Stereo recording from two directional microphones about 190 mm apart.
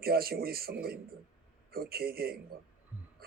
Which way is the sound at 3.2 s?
50° right (ahead or behind).